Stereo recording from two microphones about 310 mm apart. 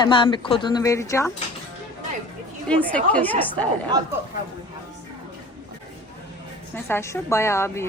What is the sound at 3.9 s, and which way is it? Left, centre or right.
Speech, centre.